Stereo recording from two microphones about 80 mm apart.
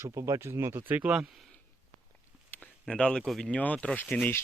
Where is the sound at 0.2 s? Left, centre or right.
Right.